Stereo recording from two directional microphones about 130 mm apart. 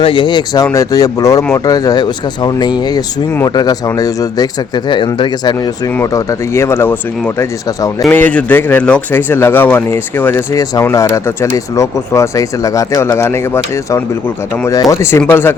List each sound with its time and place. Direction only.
0.0 s speech: 40° left (ahead or behind)
6.0 s speech: 20° left (ahead or behind)
8.1 s speech: 10° left (ahead or behind)